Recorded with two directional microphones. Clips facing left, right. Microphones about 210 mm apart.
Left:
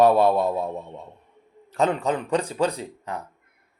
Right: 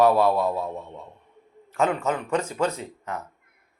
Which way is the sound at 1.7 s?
35° left (ahead or behind).